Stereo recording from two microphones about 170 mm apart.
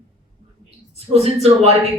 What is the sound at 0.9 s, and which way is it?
Speech, 40° right (ahead or behind).